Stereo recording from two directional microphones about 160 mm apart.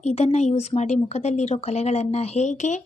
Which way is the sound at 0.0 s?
40° left (ahead or behind).